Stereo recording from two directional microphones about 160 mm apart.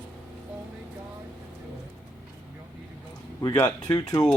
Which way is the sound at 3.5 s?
15° left (ahead or behind).